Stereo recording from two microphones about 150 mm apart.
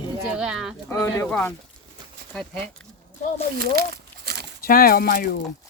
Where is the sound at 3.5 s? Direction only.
85° right.